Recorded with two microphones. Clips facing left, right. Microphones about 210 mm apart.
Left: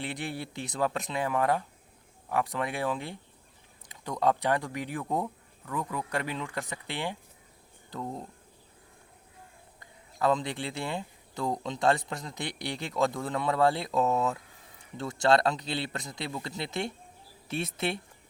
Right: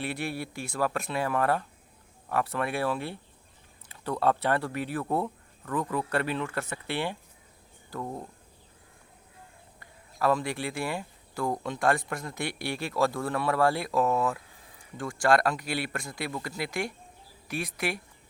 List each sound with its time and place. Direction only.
0.0 s speech: 20° left (ahead or behind)
9.8 s speech: 20° left (ahead or behind)